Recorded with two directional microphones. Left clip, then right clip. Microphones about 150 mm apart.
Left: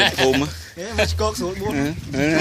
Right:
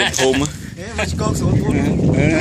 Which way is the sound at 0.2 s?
45° left (ahead or behind).